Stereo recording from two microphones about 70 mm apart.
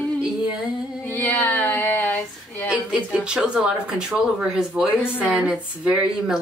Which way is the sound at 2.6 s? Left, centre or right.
Centre.